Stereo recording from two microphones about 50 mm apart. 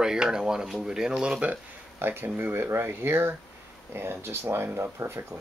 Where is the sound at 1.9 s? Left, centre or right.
Right.